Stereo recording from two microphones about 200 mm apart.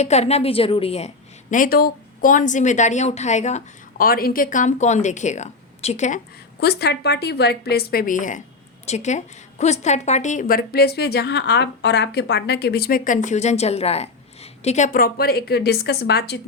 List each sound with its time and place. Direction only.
0.0 s a woman's voice: 35° left (ahead or behind)
6.6 s a woman's voice: 55° left (ahead or behind)